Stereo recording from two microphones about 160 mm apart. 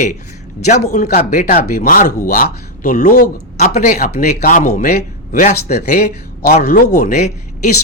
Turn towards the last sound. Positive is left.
turn(degrees=45)  # may be behind; listen again after turning